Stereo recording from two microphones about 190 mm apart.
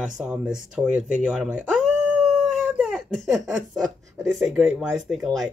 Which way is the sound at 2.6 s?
10° right (ahead or behind).